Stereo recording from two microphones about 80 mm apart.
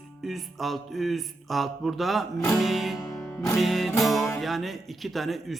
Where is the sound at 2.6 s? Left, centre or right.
Centre.